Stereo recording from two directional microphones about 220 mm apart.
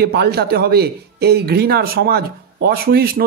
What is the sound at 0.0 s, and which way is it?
A man's voice, 45° right (ahead or behind).